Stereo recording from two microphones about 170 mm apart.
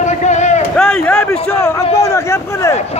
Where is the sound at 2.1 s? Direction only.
15° left (ahead or behind).